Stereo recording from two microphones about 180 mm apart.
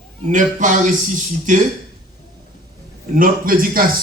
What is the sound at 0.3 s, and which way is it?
A man's voice, 45° right (ahead or behind).